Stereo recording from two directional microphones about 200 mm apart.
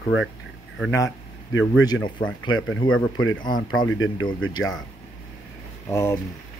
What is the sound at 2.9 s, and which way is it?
Speech, 90° left.